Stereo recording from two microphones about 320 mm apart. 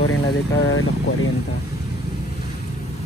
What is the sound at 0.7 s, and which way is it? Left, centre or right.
Speech, left.